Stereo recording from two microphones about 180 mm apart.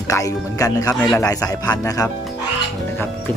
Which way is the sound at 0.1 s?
20° left (ahead or behind).